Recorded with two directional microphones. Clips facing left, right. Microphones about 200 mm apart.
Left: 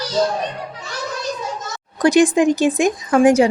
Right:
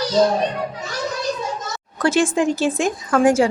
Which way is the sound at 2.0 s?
15° left (ahead or behind).